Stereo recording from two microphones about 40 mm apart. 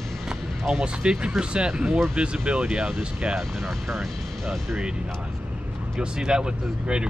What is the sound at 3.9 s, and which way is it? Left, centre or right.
Speech, centre.